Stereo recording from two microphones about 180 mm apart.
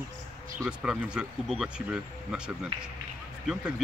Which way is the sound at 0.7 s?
5° right (ahead or behind).